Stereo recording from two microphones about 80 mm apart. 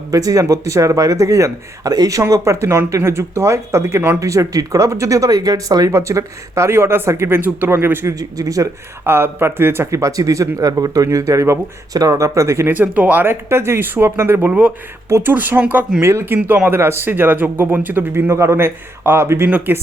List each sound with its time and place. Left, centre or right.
0.1 s speech: right
8.1 s a man's voice: right
9.0 s speech: right
12.7 s a man's voice: right
19.5 s a man's voice: centre